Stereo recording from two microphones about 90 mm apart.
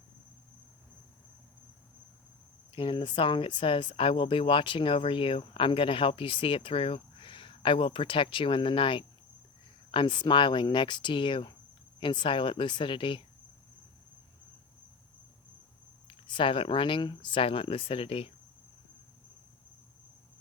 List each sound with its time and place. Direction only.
2.7 s speech: 65° left (ahead or behind)
9.9 s speech: 65° left (ahead or behind)
16.0 s speech: 70° left (ahead or behind); by 18.3 s 90° left